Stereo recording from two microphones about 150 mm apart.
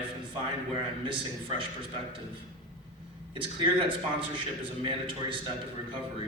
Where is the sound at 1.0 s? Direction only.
35° right (ahead or behind).